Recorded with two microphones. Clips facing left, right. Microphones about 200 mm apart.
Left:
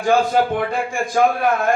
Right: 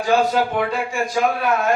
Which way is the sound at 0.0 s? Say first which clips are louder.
Left 1 dB; 50° left (ahead or behind).